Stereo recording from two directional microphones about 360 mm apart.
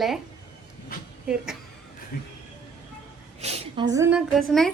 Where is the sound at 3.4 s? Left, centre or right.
Centre.